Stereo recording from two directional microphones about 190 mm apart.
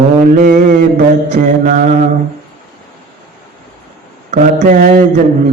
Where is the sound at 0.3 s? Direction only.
45° right (ahead or behind).